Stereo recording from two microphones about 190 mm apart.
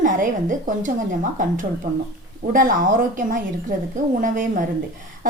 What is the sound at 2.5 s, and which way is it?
A woman's voice, 45° right (ahead or behind).